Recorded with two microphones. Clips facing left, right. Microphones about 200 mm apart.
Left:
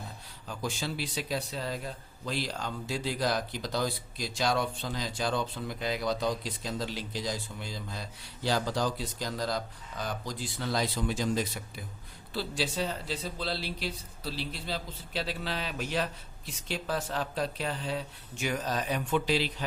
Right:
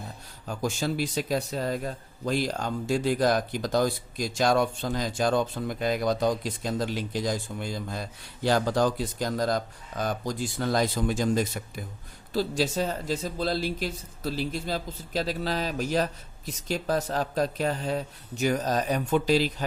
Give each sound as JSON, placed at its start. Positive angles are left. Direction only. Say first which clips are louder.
{"t": 0.4, "sound": "speech", "louder": "right 6 dB", "side_deg": -45}